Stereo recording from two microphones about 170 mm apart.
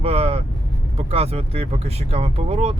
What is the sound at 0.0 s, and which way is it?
Vehicle, 35° right (ahead or behind).